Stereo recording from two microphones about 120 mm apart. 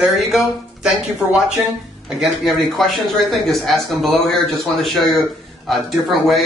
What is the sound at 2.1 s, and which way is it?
A man's voice, centre (ahead or behind).